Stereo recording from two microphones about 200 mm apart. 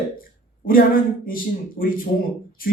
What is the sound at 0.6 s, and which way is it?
Speech, 45° left (ahead or behind).